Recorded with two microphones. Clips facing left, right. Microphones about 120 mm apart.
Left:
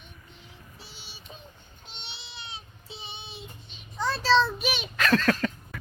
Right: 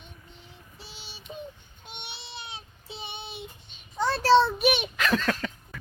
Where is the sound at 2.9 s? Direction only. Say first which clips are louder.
Right 4 dB; 60° right (ahead or behind).